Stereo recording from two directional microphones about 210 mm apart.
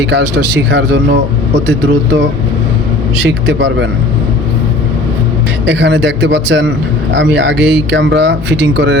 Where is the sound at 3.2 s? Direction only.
55° right (ahead or behind).